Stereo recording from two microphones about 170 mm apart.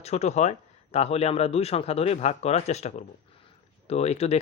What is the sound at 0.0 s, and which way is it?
Speech, 40° left (ahead or behind).